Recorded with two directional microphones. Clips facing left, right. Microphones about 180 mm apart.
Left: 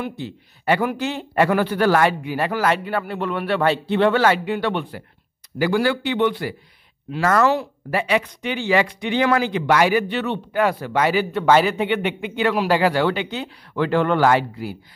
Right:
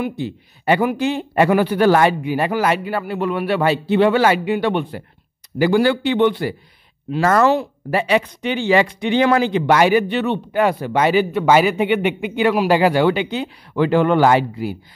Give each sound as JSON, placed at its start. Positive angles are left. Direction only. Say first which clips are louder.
{"t": 0.0, "sound": "speech", "louder": "right 5 dB", "side_deg": -15}